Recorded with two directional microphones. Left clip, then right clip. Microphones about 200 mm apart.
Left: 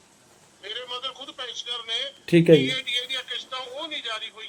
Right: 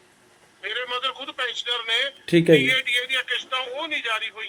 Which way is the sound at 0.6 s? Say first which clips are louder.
Right 6 dB; centre (ahead or behind).